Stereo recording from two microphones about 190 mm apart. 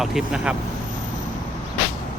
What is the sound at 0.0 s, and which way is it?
Speech, centre (ahead or behind).